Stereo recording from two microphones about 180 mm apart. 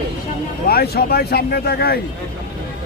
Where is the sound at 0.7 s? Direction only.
60° left (ahead or behind).